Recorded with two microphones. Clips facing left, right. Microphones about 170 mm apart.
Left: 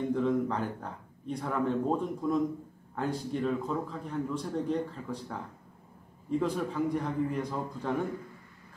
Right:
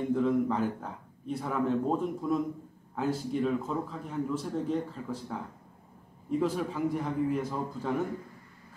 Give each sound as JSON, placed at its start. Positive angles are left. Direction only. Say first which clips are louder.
{"t": 0.1, "sound": "a man's voice", "louder": "right 3 dB", "side_deg": -5}
{"t": 6.4, "sound": "a man's voice", "louder": "right 1 dB", "side_deg": -5}